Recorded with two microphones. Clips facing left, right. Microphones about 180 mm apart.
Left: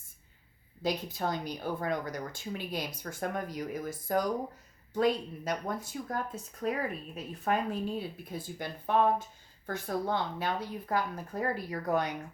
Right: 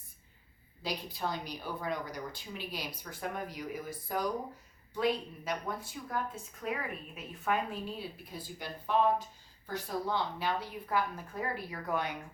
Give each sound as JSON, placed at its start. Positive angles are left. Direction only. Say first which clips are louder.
{"t": 0.8, "sound": "a woman's voice", "louder": "left 5 dB", "side_deg": 45}